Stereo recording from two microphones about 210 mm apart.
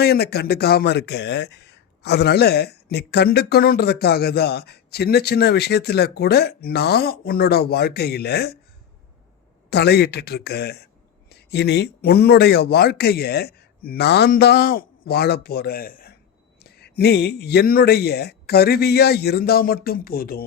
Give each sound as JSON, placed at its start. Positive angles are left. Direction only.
{"t": 0.0, "sound": "speech", "side_deg": 50}
{"t": 9.6, "sound": "speech", "side_deg": 50}